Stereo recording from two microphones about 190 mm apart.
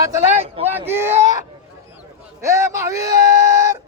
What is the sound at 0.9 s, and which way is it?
Speech, 10° right (ahead or behind).